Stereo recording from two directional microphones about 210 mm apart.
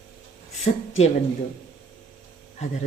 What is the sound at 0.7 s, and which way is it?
Speech, 30° left (ahead or behind).